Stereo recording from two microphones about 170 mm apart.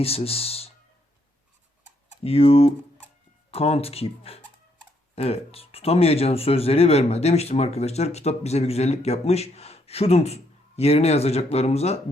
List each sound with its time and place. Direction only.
0.0 s speech: 35° left (ahead or behind)
2.2 s speech: 35° left (ahead or behind)